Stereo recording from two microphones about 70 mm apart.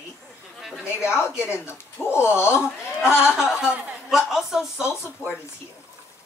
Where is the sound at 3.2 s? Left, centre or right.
Centre.